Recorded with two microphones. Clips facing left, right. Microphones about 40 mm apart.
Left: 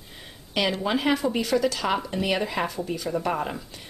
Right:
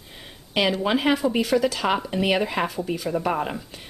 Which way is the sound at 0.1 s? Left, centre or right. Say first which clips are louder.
Right 3 dB; centre.